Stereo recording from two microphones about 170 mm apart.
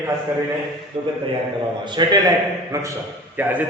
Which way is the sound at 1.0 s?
35° right (ahead or behind).